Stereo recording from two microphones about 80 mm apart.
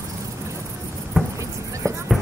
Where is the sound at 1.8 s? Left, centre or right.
Right.